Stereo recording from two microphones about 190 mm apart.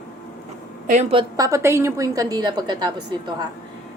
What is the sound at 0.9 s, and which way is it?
Speech, 35° right (ahead or behind).